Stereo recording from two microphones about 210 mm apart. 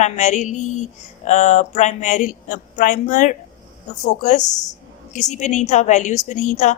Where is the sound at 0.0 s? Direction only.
35° left (ahead or behind).